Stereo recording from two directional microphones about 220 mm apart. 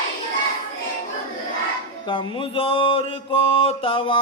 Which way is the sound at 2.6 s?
25° left (ahead or behind).